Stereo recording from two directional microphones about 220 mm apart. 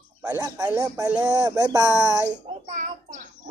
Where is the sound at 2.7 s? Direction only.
35° right (ahead or behind).